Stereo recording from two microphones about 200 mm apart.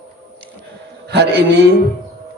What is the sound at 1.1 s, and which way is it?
Speech, 55° right (ahead or behind).